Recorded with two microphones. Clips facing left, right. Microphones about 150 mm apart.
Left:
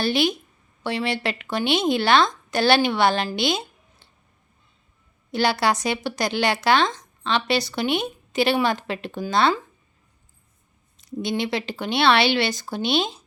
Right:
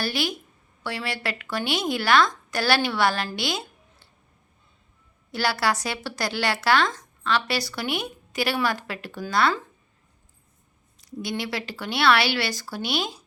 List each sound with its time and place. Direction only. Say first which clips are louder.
0.0 s speech: left 6 dB; 20° left (ahead or behind)
5.3 s speech: left 4 dB; 20° left (ahead or behind)
10.9 s speech: left 5 dB; 25° left (ahead or behind)